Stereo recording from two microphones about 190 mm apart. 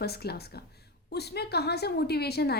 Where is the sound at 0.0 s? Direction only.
55° left (ahead or behind).